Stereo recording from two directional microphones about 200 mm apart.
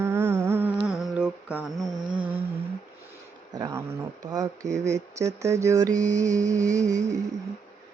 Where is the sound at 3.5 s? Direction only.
15° right (ahead or behind).